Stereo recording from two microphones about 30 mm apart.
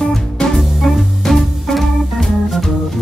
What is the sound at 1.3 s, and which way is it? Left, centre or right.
Music, centre.